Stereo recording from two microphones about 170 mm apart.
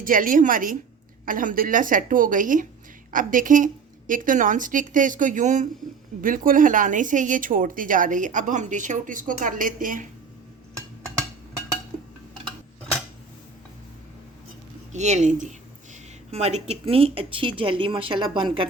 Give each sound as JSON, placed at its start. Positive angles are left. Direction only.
{"t": 0.0, "sound": "speech", "side_deg": -55}
{"t": 14.9, "sound": "speech", "side_deg": -45}